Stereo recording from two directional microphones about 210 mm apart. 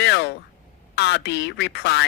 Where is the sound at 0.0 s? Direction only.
55° left (ahead or behind).